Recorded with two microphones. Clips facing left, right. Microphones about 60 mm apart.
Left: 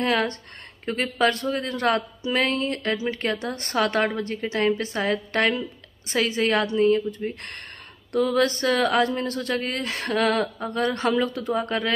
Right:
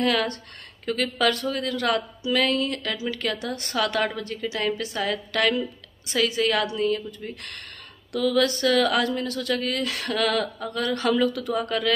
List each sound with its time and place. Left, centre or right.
0.0 s speech: left